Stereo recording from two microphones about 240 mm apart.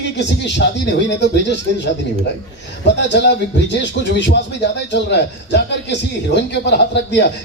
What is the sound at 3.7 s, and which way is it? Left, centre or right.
Speech, left.